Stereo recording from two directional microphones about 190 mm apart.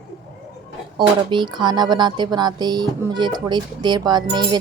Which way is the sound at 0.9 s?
25° right (ahead or behind).